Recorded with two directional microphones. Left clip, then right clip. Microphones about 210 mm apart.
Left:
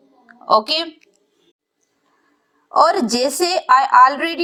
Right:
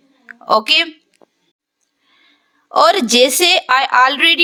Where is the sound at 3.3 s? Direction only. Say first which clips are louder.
Right 2 dB; 45° right (ahead or behind).